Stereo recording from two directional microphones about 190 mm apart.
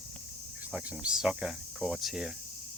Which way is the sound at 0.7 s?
5° right (ahead or behind).